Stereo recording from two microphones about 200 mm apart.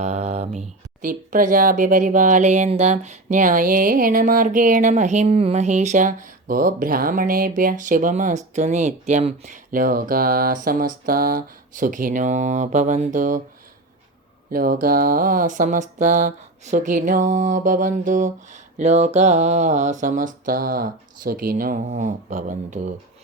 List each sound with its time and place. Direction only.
0.0 s speech: 35° right (ahead or behind)
14.5 s speech: 45° right (ahead or behind)